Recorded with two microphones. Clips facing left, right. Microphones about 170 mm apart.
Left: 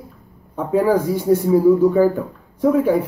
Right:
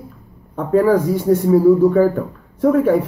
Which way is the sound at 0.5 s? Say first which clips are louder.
Right 2 dB; centre (ahead or behind).